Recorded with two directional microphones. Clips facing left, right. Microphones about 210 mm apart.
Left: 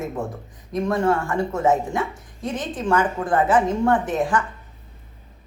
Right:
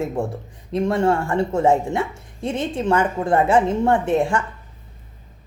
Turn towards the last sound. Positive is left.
turn(degrees=-25)  # may be behind; listen again after turning